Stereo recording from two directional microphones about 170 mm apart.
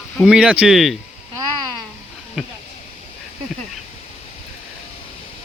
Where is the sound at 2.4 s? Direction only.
5° right (ahead or behind).